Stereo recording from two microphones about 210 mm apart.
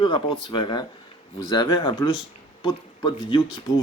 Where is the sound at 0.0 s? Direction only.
25° left (ahead or behind).